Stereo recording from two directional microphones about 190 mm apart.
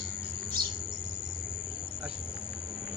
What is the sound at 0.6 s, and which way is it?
Bird, 25° right (ahead or behind).